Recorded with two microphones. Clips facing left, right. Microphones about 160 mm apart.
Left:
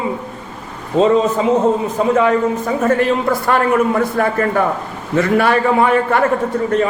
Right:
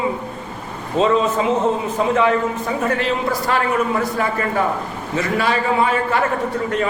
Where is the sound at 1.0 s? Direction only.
35° left (ahead or behind).